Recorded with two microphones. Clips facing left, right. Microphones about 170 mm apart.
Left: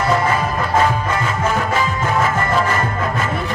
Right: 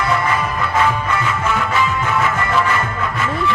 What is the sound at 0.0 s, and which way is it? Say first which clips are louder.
Music: left 2 dB; 35° left (ahead or behind).